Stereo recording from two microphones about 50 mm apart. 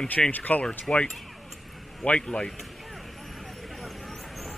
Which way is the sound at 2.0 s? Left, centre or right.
Left.